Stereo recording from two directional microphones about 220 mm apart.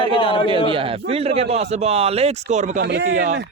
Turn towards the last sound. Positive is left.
turn(degrees=-50)  # may be behind; listen again after turning